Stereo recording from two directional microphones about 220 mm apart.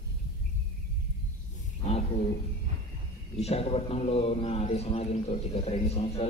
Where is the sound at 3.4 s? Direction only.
25° left (ahead or behind).